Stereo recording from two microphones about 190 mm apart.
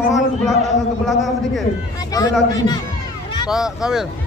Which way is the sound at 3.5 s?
5° right (ahead or behind).